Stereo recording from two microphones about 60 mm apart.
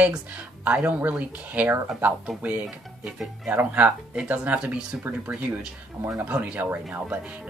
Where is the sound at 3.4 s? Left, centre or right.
Right.